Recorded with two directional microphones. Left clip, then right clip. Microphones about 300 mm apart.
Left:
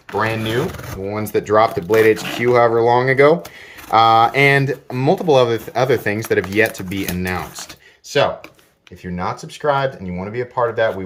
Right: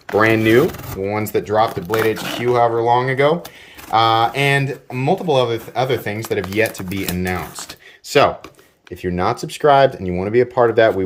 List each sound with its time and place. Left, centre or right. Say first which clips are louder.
0.1 s speech: right 6 dB; centre
1.0 s speech: even; centre
9.1 s speech: right 4 dB; right